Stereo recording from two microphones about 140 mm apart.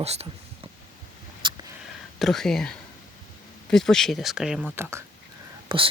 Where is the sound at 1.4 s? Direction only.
35° right (ahead or behind).